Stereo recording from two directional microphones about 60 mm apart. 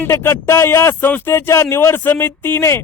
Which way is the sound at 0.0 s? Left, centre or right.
Left.